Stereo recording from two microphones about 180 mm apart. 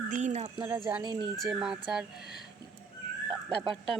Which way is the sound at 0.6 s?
10° right (ahead or behind).